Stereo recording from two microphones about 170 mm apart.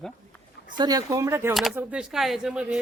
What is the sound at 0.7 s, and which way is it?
Speech, 20° right (ahead or behind).